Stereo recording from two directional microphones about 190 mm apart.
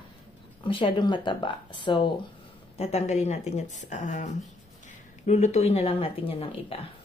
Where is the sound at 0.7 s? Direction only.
25° left (ahead or behind).